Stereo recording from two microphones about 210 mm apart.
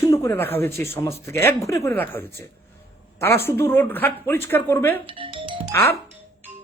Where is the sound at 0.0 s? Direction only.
15° left (ahead or behind).